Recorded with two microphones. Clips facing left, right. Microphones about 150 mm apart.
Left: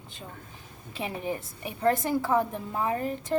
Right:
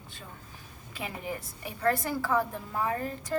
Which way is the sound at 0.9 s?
25° left (ahead or behind).